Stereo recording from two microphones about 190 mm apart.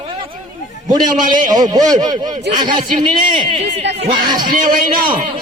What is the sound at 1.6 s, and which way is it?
A man's voice, 20° right (ahead or behind).